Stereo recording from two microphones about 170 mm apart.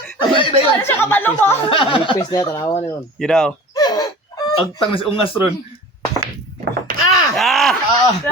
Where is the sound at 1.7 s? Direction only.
30° left (ahead or behind).